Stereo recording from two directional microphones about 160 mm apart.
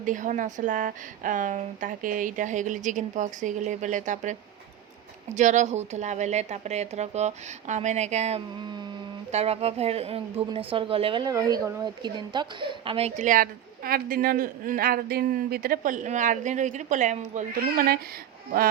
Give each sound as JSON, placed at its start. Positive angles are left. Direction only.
{"t": 0.0, "sound": "a woman's voice", "side_deg": -50}
{"t": 17.6, "sound": "speech", "side_deg": -70}